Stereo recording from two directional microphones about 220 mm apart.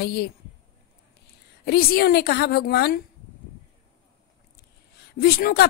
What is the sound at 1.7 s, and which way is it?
Speech, 45° left (ahead or behind).